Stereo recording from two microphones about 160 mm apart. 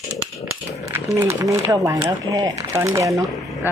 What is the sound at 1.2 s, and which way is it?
Speech, 20° right (ahead or behind).